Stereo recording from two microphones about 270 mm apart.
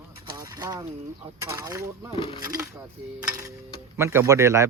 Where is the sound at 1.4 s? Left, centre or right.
Centre.